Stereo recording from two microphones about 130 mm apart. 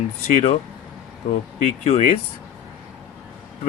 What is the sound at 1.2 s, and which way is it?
Speech, 75° left (ahead or behind).